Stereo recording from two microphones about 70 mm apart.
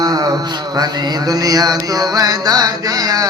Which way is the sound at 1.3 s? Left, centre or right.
Right.